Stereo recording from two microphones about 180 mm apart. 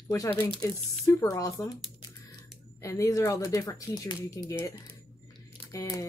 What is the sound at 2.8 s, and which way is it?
Speech, 15° left (ahead or behind).